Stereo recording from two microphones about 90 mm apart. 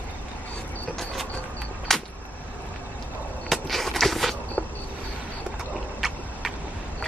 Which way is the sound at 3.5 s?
Centre (ahead or behind).